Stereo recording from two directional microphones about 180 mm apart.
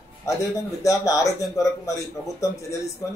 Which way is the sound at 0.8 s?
20° left (ahead or behind).